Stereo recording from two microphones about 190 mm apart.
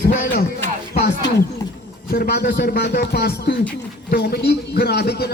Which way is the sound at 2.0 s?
55° left (ahead or behind).